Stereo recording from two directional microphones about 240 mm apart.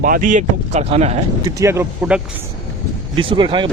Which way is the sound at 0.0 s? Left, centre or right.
Right.